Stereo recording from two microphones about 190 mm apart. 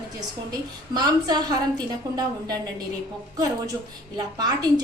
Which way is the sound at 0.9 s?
20° right (ahead or behind).